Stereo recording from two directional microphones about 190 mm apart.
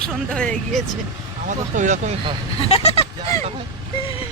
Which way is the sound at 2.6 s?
30° left (ahead or behind).